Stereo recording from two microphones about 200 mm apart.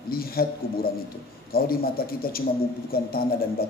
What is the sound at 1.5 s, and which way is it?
Speech, 50° left (ahead or behind).